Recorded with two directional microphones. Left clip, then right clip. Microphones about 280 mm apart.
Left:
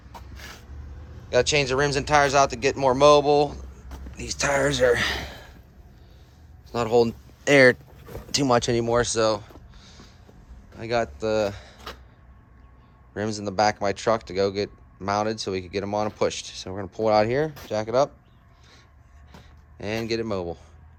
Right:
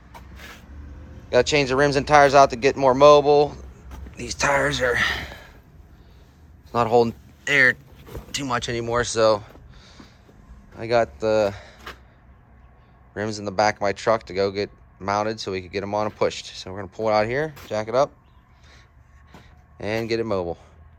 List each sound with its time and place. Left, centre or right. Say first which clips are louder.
1.3 s speech: right 2 dB; centre
6.7 s speech: right 2 dB; centre
7.4 s speech: left 1 dB; left
13.1 s speech: right 1 dB; centre
19.3 s speech: right 2 dB; centre